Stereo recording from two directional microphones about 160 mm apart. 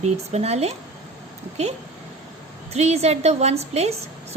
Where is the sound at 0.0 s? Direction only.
40° right (ahead or behind).